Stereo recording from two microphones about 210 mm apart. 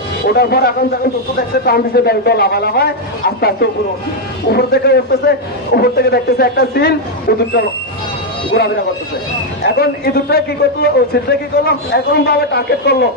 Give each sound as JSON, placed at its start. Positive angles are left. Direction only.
{"t": 0.3, "sound": "a man's voice", "side_deg": 50}